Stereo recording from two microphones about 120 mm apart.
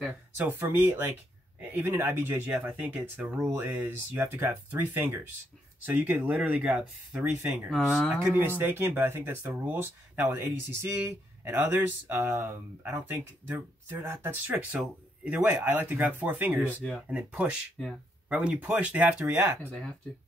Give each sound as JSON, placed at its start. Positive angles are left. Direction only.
{"t": 0.4, "sound": "speech", "side_deg": -15}
{"t": 8.4, "sound": "speech", "side_deg": -15}
{"t": 16.8, "sound": "speech", "side_deg": 0}
{"t": 17.2, "sound": "speech", "side_deg": -15}
{"t": 17.8, "sound": "speech", "side_deg": 0}
{"t": 18.3, "sound": "speech", "side_deg": -10}